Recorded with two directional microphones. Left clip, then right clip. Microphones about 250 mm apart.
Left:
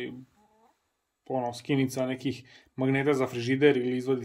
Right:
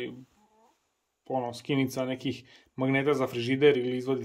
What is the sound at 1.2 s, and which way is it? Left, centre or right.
Speech, centre.